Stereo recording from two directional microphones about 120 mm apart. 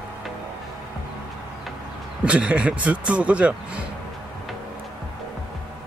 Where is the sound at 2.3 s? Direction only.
10° right (ahead or behind).